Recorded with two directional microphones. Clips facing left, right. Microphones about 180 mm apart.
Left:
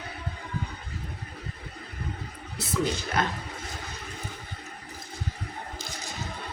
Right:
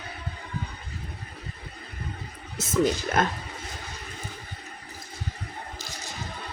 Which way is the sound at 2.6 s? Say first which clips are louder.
Right 5 dB; 45° right (ahead or behind).